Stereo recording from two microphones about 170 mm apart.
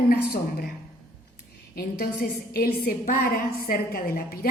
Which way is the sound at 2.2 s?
65° left (ahead or behind).